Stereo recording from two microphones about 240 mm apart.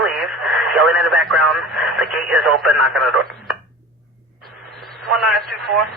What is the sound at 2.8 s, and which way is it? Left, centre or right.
Speech, right.